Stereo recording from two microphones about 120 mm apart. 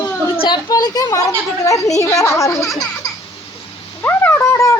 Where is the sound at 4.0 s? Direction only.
20° left (ahead or behind).